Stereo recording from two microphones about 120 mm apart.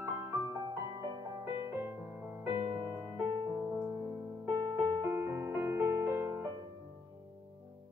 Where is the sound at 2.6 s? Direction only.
10° right (ahead or behind).